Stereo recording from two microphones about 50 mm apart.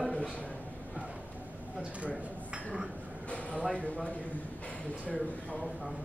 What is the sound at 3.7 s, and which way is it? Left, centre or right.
Speech, left.